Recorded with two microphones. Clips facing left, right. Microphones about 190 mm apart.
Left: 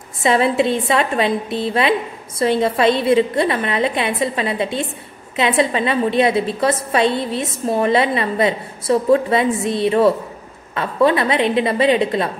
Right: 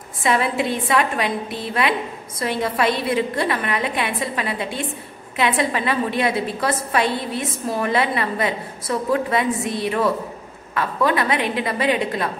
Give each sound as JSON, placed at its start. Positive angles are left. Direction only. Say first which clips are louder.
{"t": 0.2, "sound": "a woman's voice", "louder": "left 5 dB", "side_deg": 25}